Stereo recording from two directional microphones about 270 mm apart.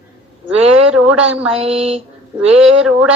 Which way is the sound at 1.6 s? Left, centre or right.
Right.